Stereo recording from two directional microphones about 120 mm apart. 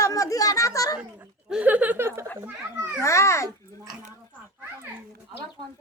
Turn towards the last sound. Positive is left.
turn(degrees=-30)  # may be behind; listen again after turning